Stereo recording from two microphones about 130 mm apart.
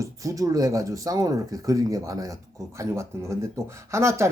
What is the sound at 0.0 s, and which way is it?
Speech, 25° right (ahead or behind).